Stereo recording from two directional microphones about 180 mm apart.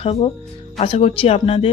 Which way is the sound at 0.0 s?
35° left (ahead or behind).